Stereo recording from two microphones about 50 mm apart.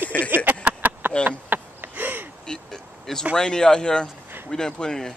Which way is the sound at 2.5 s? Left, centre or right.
Centre.